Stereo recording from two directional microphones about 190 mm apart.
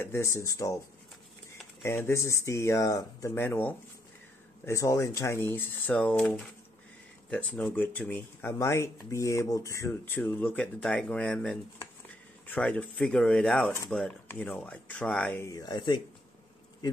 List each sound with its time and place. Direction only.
0.0 s speech: 15° left (ahead or behind)